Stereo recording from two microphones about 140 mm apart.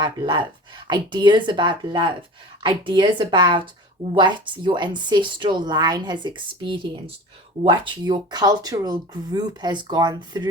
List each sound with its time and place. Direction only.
0.0 s speech: 35° right (ahead or behind)